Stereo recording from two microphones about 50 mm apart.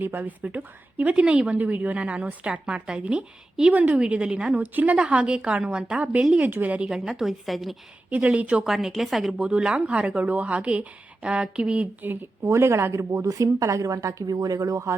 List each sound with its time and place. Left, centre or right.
0.0 s a woman's voice: right
4.0 s a woman's voice: centre
4.5 s a woman's voice: right
6.4 s a woman's voice: right
6.8 s a woman's voice: centre
8.1 s a woman's voice: right
8.6 s a woman's voice: centre
9.4 s a woman's voice: centre
12.5 s a woman's voice: right